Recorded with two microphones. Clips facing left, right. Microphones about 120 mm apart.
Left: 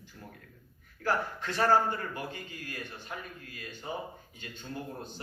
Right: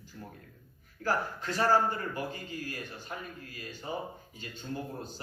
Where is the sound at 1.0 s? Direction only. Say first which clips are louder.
Even; 40° right (ahead or behind).